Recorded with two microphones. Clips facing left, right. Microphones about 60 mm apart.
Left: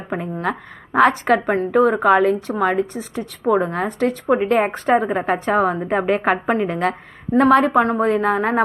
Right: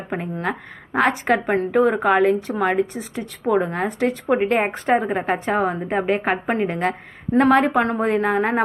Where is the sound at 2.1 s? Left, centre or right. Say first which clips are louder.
Left 1 dB; right.